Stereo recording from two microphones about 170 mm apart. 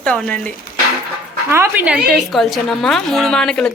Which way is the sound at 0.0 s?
5° left (ahead or behind).